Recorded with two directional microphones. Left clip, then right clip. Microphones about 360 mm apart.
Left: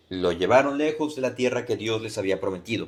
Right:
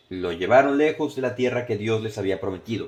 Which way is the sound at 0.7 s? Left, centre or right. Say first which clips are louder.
Right 4 dB; right.